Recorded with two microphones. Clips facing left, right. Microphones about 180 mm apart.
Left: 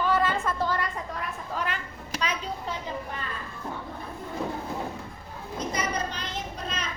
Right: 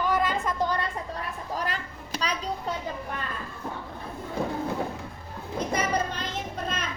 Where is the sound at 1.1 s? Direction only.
35° right (ahead or behind).